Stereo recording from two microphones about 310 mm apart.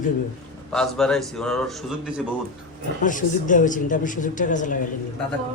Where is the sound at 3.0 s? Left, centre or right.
Left.